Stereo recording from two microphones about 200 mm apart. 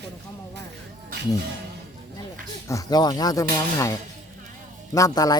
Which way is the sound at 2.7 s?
20° left (ahead or behind).